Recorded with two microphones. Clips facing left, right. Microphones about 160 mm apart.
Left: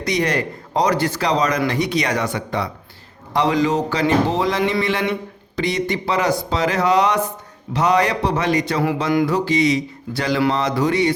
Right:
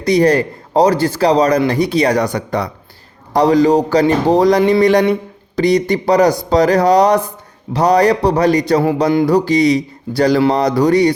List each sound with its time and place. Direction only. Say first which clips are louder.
0.0 s speech: right 9 dB; 35° right (ahead or behind)